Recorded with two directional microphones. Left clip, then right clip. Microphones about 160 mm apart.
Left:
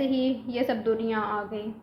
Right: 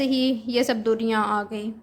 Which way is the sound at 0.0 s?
50° right (ahead or behind).